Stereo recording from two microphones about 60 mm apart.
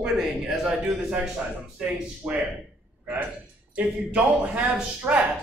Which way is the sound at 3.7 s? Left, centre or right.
Right.